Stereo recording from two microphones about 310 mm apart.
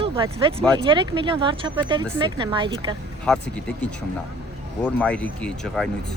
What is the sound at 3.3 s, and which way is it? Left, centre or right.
Speech, centre.